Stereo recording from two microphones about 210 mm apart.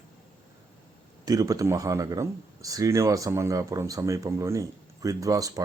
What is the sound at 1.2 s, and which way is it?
Speech, 15° right (ahead or behind).